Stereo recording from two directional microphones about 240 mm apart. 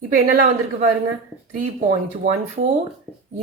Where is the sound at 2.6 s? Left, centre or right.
Right.